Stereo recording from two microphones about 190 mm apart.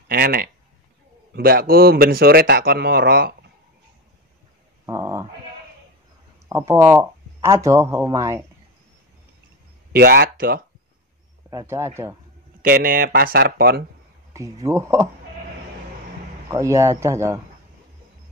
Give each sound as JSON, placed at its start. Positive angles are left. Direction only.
{"t": 0.1, "sound": "speech", "side_deg": -50}
{"t": 4.8, "sound": "a sound", "side_deg": -15}
{"t": 6.5, "sound": "speech", "side_deg": -15}
{"t": 9.9, "sound": "speech", "side_deg": -55}
{"t": 11.5, "sound": "speech", "side_deg": -15}
{"t": 12.6, "sound": "speech", "side_deg": -50}
{"t": 14.3, "sound": "speech", "side_deg": -15}
{"t": 16.4, "sound": "speech", "side_deg": -15}